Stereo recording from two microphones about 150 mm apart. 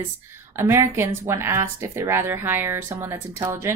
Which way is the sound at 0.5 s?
15° right (ahead or behind).